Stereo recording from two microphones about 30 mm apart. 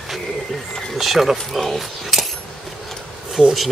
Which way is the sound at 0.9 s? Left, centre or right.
Centre.